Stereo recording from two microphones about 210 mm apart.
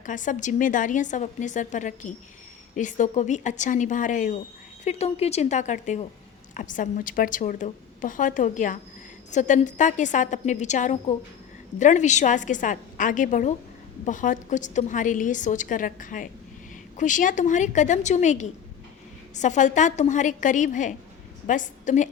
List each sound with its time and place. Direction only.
0.0 s a woman's voice: 40° left (ahead or behind)